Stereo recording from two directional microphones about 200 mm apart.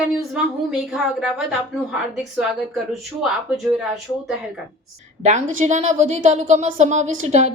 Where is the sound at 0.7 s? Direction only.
5° right (ahead or behind).